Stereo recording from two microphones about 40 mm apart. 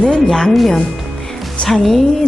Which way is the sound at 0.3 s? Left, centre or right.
Centre.